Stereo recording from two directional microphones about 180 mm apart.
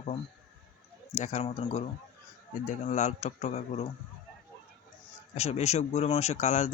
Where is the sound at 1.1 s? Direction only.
40° left (ahead or behind).